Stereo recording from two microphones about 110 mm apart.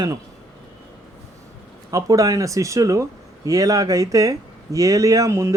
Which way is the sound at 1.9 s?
35° right (ahead or behind).